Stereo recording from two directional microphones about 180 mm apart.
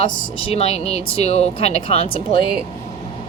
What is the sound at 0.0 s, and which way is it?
Speech, 30° left (ahead or behind).